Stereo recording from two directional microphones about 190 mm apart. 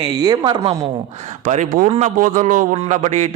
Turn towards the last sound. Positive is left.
turn(degrees=-35)  # may be behind; listen again after turning